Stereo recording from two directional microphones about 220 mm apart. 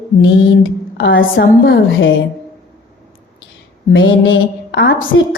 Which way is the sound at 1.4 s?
45° left (ahead or behind).